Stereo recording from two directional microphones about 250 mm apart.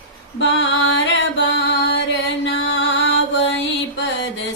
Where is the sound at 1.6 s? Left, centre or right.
Left.